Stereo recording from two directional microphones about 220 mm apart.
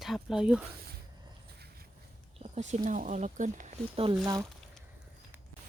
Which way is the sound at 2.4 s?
30° right (ahead or behind).